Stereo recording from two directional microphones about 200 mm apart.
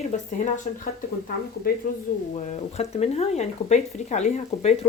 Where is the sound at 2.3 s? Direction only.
35° left (ahead or behind).